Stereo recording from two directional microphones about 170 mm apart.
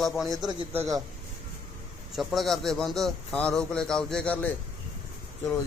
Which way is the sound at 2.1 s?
Centre (ahead or behind).